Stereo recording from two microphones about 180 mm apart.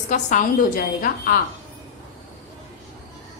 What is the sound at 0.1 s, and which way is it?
Speech, 45° left (ahead or behind).